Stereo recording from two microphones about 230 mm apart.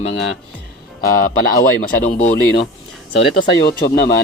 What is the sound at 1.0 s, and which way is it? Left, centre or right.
Speech, left.